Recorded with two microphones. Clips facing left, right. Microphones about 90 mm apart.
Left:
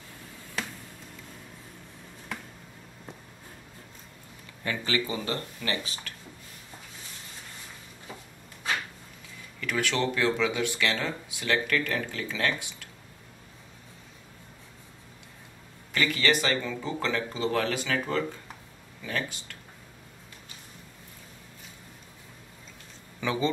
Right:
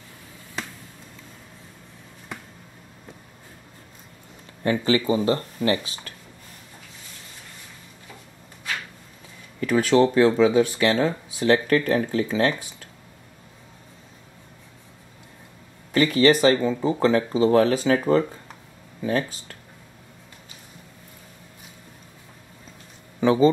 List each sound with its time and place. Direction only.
4.6 s speech: 30° right (ahead or behind)
9.6 s speech: 35° right (ahead or behind)
15.9 s speech: 35° right (ahead or behind)
23.2 s speech: 35° right (ahead or behind)